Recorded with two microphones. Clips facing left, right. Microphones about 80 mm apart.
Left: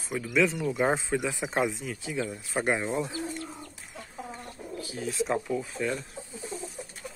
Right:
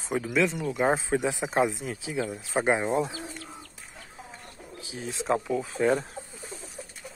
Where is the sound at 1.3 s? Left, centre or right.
Centre.